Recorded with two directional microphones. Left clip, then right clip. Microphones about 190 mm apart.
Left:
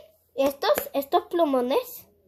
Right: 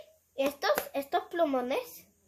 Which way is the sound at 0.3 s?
35° left (ahead or behind).